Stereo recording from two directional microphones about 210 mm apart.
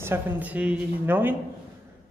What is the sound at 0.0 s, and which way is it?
Speech, 10° right (ahead or behind).